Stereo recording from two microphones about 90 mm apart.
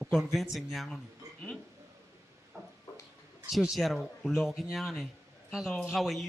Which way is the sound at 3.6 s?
Centre (ahead or behind).